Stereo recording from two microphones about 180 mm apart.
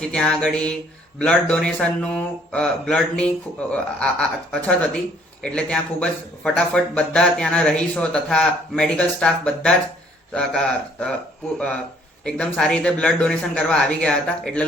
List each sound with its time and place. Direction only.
0.0 s speech: 5° left (ahead or behind)
12.2 s speech: 5° left (ahead or behind)